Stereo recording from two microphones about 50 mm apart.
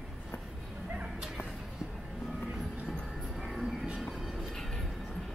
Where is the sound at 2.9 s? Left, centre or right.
Centre.